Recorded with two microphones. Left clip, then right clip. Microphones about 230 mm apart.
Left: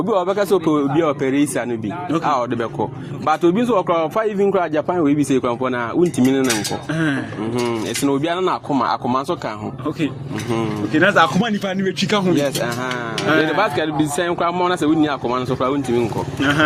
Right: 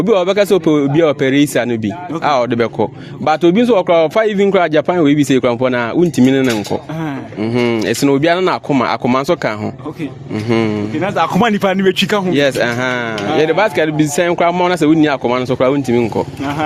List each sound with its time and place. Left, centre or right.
0.0 s speech: right
10.9 s speech: centre
11.3 s a man's voice: right
12.4 s speech: right
16.4 s speech: centre